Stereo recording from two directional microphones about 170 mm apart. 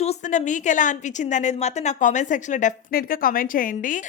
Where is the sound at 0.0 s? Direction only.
40° left (ahead or behind).